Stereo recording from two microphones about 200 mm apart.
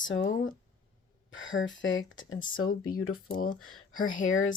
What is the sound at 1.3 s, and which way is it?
Speech, 75° left (ahead or behind).